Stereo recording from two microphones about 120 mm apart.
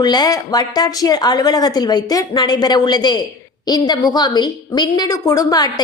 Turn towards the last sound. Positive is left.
turn(degrees=30)  # may be behind; listen again after turning